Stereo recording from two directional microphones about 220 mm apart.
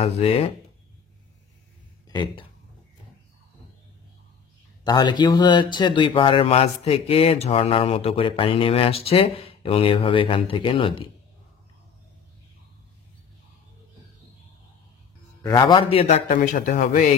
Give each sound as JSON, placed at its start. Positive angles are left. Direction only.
{"t": 0.0, "sound": "speech", "side_deg": 25}
{"t": 2.0, "sound": "speech", "side_deg": 20}
{"t": 4.8, "sound": "speech", "side_deg": 20}
{"t": 15.4, "sound": "a man's voice", "side_deg": 15}